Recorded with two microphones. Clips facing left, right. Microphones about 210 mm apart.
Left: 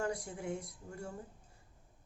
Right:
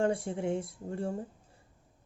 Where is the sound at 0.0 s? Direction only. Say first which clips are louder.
Right 8 dB; 30° right (ahead or behind).